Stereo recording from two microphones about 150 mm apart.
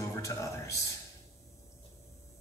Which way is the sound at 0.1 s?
20° left (ahead or behind).